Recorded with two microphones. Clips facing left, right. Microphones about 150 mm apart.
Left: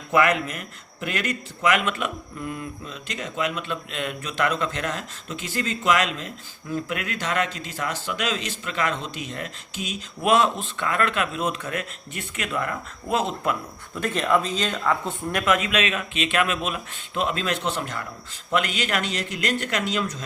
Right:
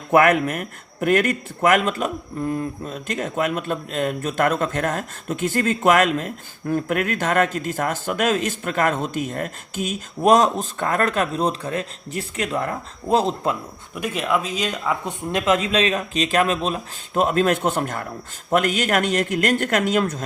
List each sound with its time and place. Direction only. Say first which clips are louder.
0.1 s a man's voice: right 5 dB; 50° right (ahead or behind); by 13.6 s 30° right (ahead or behind)
13.9 s a man's voice: even; 10° right (ahead or behind); by 20.2 s 50° right (ahead or behind)